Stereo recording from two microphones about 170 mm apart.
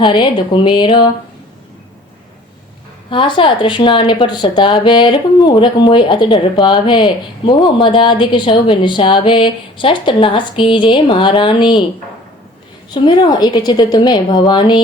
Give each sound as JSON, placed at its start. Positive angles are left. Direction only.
{"t": 0.0, "sound": "a woman's voice", "side_deg": 25}
{"t": 3.1, "sound": "a woman's voice", "side_deg": 30}
{"t": 12.9, "sound": "a woman's voice", "side_deg": 25}